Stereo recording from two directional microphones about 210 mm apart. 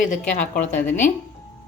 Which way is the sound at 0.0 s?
40° left (ahead or behind).